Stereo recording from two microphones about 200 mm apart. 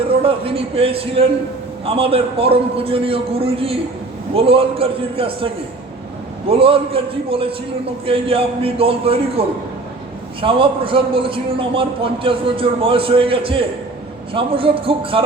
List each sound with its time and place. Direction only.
0.2 s a man's voice: 30° right (ahead or behind)
6.5 s a man's voice: 25° right (ahead or behind)
10.4 s a man's voice: 25° right (ahead or behind)